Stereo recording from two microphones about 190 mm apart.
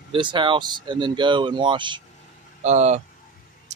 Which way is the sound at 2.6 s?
35° right (ahead or behind).